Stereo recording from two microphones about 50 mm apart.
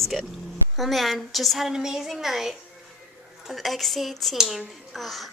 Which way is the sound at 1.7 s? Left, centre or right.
Centre.